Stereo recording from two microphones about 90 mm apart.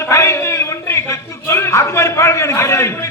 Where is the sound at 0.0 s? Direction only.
30° left (ahead or behind).